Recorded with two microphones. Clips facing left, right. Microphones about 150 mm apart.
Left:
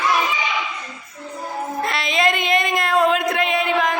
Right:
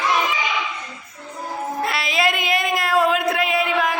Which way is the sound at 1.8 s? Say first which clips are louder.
Left 2 dB; 5° right (ahead or behind).